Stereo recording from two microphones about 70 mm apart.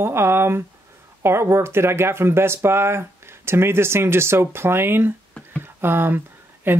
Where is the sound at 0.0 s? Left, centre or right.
Right.